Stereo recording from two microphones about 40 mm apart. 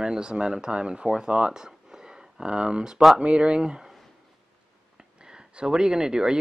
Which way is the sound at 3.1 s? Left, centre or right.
Right.